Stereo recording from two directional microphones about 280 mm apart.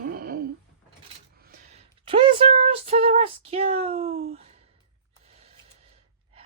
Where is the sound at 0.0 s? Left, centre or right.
Right.